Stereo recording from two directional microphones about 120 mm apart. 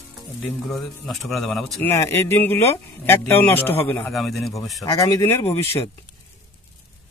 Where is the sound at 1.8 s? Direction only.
20° left (ahead or behind).